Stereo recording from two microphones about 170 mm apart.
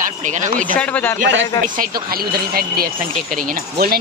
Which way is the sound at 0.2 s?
50° right (ahead or behind).